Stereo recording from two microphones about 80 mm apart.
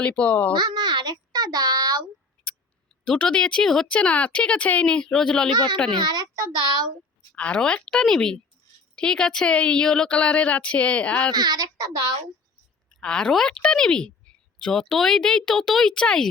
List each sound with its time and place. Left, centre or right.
0.0 s speech: centre
0.5 s a child's voice: right
3.0 s speech: centre
5.9 s a child's voice: right
6.3 s a child's voice: right
7.3 s speech: centre
11.3 s a child's voice: right
13.0 s speech: centre